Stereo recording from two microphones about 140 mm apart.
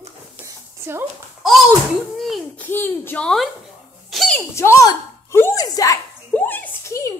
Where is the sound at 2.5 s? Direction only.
15° left (ahead or behind).